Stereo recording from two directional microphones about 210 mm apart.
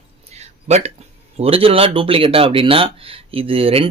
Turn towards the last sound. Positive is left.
turn(degrees=-25)  # may be behind; listen again after turning